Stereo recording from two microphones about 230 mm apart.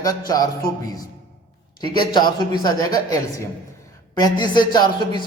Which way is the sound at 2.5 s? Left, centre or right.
Centre.